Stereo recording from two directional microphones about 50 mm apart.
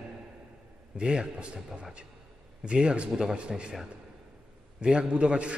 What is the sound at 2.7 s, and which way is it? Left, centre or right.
A man's voice, centre.